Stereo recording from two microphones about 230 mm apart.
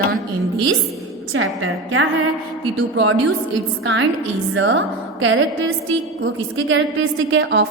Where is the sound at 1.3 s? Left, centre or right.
Right.